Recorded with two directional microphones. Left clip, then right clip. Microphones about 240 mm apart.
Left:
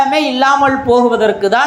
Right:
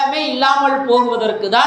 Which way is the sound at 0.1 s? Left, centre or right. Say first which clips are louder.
Left 4 dB; left.